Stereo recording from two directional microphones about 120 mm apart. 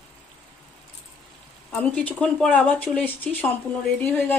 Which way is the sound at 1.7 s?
10° left (ahead or behind).